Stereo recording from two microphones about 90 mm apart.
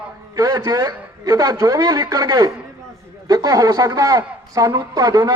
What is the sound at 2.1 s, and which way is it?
A man's voice, 50° right (ahead or behind).